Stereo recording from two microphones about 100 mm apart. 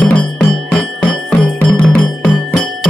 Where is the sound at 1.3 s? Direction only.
10° left (ahead or behind).